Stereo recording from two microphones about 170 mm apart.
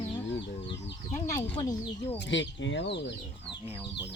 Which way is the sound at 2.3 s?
90° left.